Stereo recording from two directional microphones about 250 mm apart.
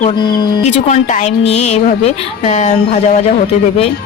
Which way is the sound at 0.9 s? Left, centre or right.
Left.